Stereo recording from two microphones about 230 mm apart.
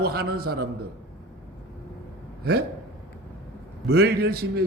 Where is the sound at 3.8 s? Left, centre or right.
Right.